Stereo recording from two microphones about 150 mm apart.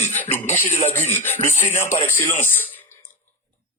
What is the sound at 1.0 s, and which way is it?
Speech, 15° left (ahead or behind).